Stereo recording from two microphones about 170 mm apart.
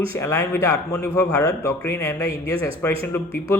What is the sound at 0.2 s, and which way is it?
A man's voice, 15° left (ahead or behind).